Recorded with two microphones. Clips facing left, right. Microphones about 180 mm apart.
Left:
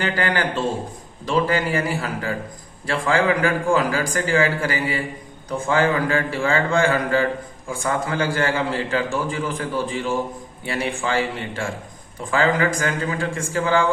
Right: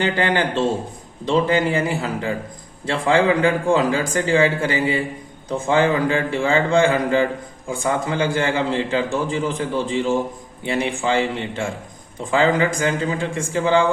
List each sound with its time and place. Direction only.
0.0 s a man's voice: 20° right (ahead or behind)